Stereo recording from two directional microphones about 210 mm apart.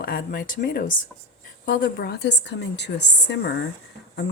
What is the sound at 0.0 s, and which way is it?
A woman's voice, 45° left (ahead or behind).